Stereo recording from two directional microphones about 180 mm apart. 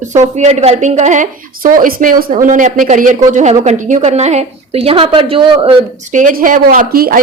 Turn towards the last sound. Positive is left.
turn(degrees=-55)  # may be behind; listen again after turning